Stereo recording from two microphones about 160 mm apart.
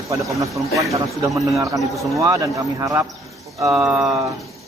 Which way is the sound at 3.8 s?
5° right (ahead or behind).